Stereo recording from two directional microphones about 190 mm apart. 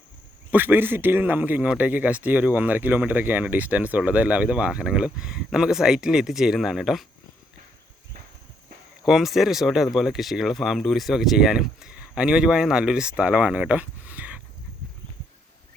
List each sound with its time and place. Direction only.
0.5 s speech: 10° right (ahead or behind)
9.0 s speech: centre (ahead or behind)